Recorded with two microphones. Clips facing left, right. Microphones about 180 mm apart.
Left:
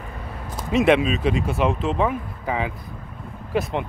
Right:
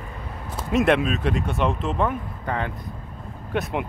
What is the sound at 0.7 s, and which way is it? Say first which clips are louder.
Speech: left 2 dB; centre (ahead or behind).